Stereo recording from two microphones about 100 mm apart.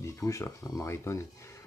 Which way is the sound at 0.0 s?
30° left (ahead or behind).